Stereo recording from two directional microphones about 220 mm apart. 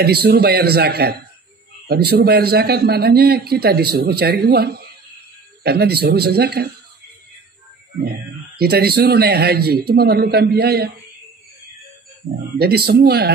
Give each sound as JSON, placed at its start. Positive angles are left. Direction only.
{"t": 0.0, "sound": "a man's voice", "side_deg": -45}
{"t": 8.0, "sound": "a man's voice", "side_deg": -45}
{"t": 12.5, "sound": "a man's voice", "side_deg": -45}